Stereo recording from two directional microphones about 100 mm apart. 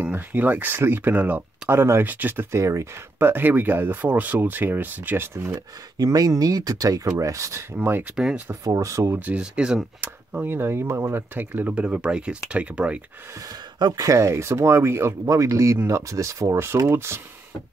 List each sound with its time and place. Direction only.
0.0 s speech: 15° right (ahead or behind)
2.5 s speech: 30° right (ahead or behind)
5.9 s speech: 40° right (ahead or behind)
7.7 s speech: 20° right (ahead or behind)
8.6 s speech: 30° right (ahead or behind)
9.2 s speech: 10° right (ahead or behind)
10.0 s speech: 20° right (ahead or behind)
13.5 s speech: 45° right (ahead or behind); by 17.2 s 25° right (ahead or behind)